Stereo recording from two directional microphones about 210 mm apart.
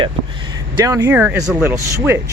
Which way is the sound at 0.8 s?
15° right (ahead or behind).